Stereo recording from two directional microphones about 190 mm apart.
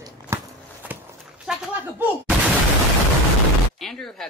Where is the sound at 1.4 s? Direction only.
5° right (ahead or behind).